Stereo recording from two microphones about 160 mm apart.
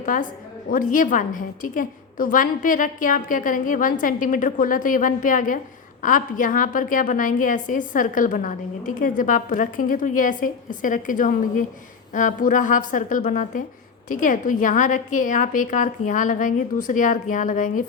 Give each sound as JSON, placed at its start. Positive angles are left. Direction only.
{"t": 0.0, "sound": "a woman's voice", "side_deg": 55}